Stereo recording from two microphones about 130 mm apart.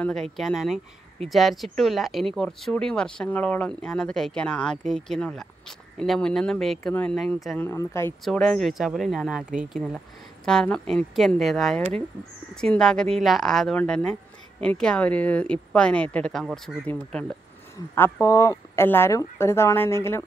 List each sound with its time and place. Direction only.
0.0 s speech: 5° left (ahead or behind); by 8.1 s 20° left (ahead or behind)
8.2 s speech: centre (ahead or behind)
10.4 s speech: 5° left (ahead or behind)
18.2 s speech: 25° left (ahead or behind)